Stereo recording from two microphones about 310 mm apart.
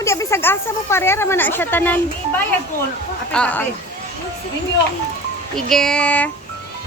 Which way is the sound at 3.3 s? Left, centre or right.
Centre.